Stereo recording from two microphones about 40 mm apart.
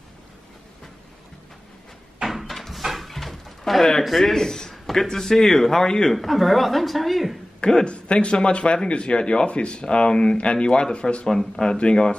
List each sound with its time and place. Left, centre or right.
2.2 s a sound: centre
4.0 s a man's voice: centre
6.1 s speech: centre
7.6 s speech: left
11.2 s a man's voice: centre